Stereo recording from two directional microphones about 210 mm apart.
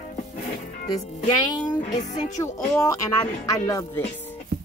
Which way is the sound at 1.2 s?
20° left (ahead or behind).